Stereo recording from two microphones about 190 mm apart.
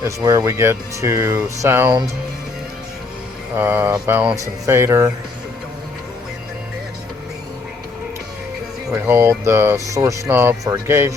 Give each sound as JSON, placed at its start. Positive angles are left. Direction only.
{"t": 0.0, "sound": "speech", "side_deg": -15}
{"t": 3.5, "sound": "speech", "side_deg": -10}
{"t": 8.9, "sound": "speech", "side_deg": -10}